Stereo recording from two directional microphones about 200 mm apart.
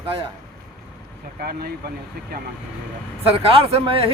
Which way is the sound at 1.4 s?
50° right (ahead or behind).